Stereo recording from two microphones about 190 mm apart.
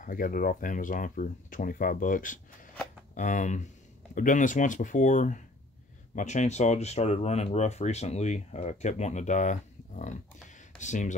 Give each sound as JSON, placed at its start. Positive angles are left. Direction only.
{"t": 0.0, "sound": "speech", "side_deg": 45}